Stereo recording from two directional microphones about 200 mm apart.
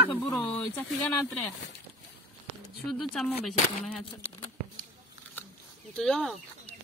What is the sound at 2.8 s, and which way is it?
Music, centre (ahead or behind).